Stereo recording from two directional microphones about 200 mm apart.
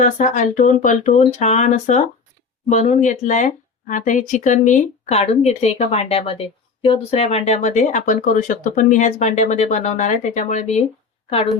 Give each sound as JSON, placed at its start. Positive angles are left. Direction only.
{"t": 0.0, "sound": "speech", "side_deg": 40}